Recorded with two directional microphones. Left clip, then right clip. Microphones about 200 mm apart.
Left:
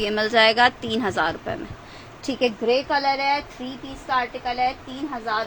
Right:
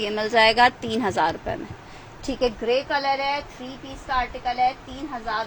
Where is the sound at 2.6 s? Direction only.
30° left (ahead or behind).